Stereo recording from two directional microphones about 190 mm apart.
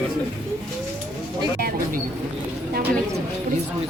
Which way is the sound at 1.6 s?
45° right (ahead or behind).